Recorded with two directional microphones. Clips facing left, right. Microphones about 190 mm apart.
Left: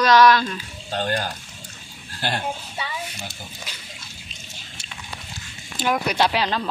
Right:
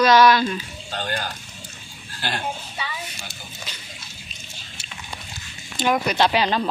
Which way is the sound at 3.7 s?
10° left (ahead or behind).